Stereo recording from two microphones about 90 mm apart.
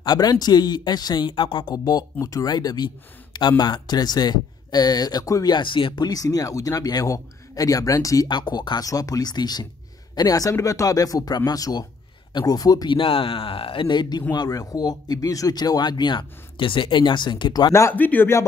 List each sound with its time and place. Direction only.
0.0 s speech: 50° left (ahead or behind); by 1.8 s 65° left (ahead or behind)
2.1 s speech: 40° left (ahead or behind)
5.5 s speech: 65° left (ahead or behind)
6.0 s speech: 40° left (ahead or behind)
8.3 s speech: 55° left (ahead or behind)
12.9 s speech: 85° left; by 17.7 s 50° left (ahead or behind)
17.9 s speech: 20° left (ahead or behind)